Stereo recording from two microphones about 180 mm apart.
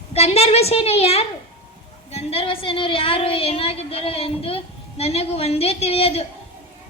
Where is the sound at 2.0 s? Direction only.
35° left (ahead or behind).